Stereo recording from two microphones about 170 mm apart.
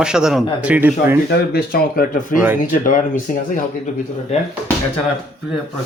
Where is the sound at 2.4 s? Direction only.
10° right (ahead or behind).